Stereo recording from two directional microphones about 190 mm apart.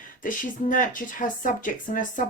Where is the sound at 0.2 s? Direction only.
45° left (ahead or behind).